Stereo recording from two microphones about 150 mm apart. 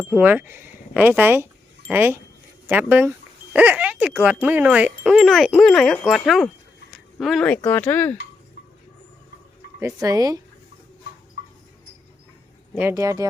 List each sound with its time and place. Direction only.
0.1 s speech: 10° right (ahead or behind); by 8.1 s 10° left (ahead or behind)
9.8 s speech: 25° right (ahead or behind)
12.7 s speech: 20° right (ahead or behind)